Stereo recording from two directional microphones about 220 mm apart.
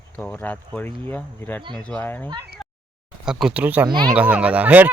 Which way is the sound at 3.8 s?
20° right (ahead or behind).